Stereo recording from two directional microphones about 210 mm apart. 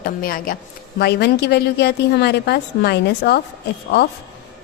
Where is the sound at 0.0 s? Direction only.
45° left (ahead or behind).